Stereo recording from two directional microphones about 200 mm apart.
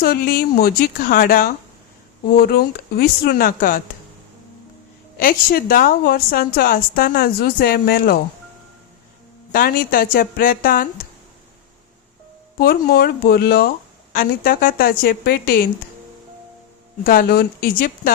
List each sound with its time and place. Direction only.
0.0 s a woman's voice: 50° left (ahead or behind)
5.2 s a woman's voice: 45° left (ahead or behind)
9.5 s a woman's voice: 45° left (ahead or behind)
12.5 s a woman's voice: 50° left (ahead or behind)
17.0 s a woman's voice: 45° left (ahead or behind)